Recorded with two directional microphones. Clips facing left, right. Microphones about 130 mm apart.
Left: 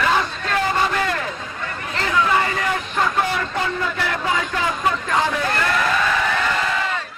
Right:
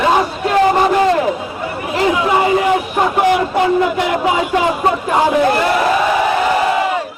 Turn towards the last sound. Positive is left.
turn(degrees=-15)  # may be behind; listen again after turning